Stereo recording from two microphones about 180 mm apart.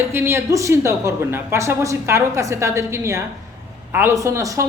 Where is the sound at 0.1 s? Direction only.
15° right (ahead or behind).